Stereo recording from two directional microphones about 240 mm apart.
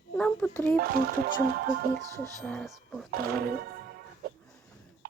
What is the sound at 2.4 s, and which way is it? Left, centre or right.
Speech, centre.